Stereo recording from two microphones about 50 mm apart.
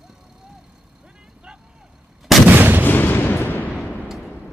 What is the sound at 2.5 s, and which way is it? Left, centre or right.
Artillery fire, right.